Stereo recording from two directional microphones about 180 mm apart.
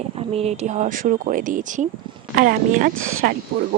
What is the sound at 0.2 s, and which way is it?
Speech, 35° right (ahead or behind).